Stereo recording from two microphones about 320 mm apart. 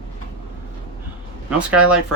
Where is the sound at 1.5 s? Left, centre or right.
Centre.